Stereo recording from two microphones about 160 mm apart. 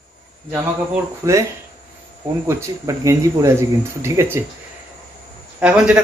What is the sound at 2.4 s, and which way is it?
A man's voice, 20° right (ahead or behind).